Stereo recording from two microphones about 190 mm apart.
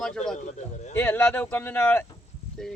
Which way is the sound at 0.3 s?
40° left (ahead or behind).